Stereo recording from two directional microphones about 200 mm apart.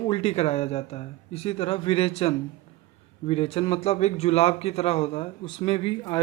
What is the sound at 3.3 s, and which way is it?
Speech, 30° left (ahead or behind).